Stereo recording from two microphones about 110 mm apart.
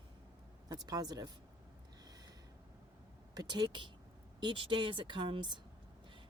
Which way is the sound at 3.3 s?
40° right (ahead or behind).